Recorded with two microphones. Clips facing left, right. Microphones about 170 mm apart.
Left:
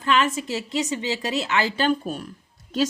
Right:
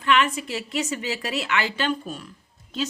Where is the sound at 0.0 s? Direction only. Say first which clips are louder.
Even; 30° left (ahead or behind).